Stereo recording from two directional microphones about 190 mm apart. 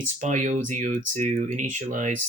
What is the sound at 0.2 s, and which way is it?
Speech, 40° right (ahead or behind).